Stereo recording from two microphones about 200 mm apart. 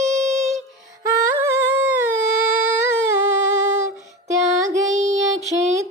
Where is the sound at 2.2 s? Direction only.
40° right (ahead or behind).